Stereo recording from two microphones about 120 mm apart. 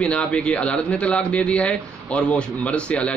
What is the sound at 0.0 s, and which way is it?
A man's voice, 10° left (ahead or behind).